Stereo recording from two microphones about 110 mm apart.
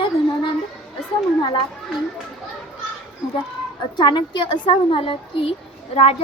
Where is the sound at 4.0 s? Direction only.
45° left (ahead or behind).